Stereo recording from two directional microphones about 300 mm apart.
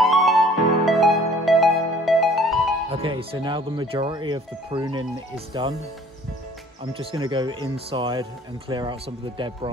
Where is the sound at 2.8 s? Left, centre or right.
Centre.